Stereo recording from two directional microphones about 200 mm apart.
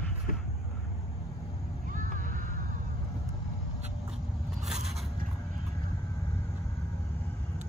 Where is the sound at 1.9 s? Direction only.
40° right (ahead or behind).